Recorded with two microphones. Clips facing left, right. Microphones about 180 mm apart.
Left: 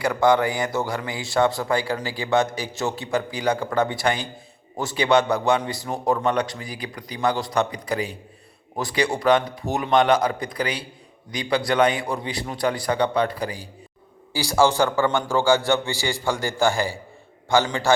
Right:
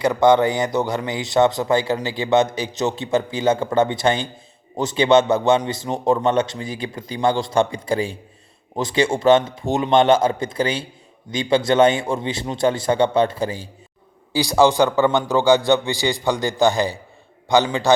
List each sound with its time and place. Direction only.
0.0 s a man's voice: 20° right (ahead or behind)